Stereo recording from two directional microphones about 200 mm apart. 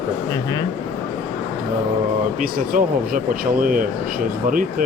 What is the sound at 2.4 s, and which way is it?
Speech, 45° right (ahead or behind).